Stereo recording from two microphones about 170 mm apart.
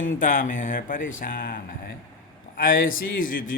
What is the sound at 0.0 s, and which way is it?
Speech, 50° left (ahead or behind).